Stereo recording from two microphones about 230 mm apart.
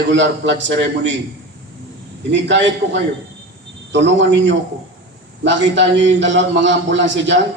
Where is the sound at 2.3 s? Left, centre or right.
Right.